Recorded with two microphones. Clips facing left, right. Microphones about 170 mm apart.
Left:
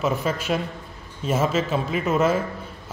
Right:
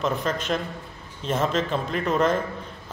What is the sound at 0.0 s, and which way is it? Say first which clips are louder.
A man's voice: left 2 dB; 5° left (ahead or behind).